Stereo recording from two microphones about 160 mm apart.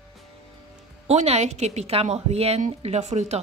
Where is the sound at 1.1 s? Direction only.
45° right (ahead or behind).